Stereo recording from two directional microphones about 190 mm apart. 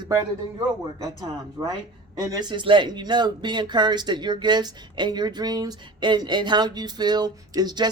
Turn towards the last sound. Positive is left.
turn(degrees=-20)  # may be behind; listen again after turning